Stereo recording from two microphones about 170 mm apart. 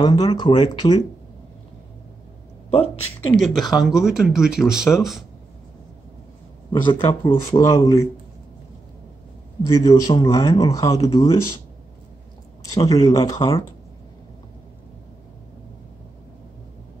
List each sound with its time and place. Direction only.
0.0 s speech: 25° left (ahead or behind)
2.7 s speech: 35° left (ahead or behind)
3.3 s speech: centre (ahead or behind)
6.7 s speech: 30° left (ahead or behind)
9.7 s speech: 20° left (ahead or behind)
12.6 s speech: 20° left (ahead or behind)